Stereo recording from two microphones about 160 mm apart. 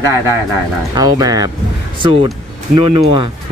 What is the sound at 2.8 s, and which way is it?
Speech, 30° right (ahead or behind).